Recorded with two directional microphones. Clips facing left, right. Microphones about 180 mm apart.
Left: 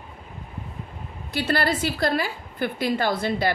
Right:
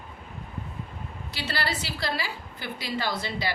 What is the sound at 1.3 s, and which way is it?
A woman's voice, 50° left (ahead or behind).